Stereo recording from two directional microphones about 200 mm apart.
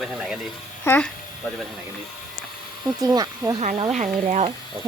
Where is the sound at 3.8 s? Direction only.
35° right (ahead or behind).